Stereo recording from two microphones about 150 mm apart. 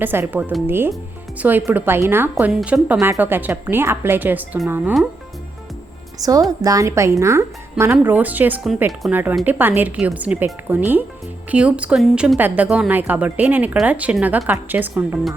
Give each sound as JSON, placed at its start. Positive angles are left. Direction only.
{"t": 0.0, "sound": "a woman's voice", "side_deg": -15}
{"t": 6.1, "sound": "a woman's voice", "side_deg": -25}